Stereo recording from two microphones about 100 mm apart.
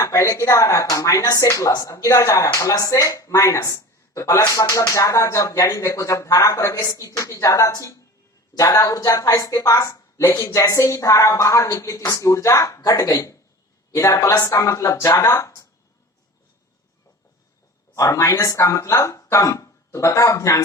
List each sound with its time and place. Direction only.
0.0 s speech: 35° left (ahead or behind)
17.9 s speech: 30° left (ahead or behind)